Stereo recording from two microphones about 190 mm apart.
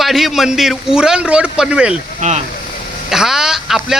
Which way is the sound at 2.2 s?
35° right (ahead or behind).